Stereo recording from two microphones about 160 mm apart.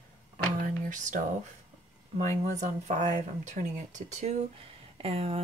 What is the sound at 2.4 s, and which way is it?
Speech, 45° right (ahead or behind).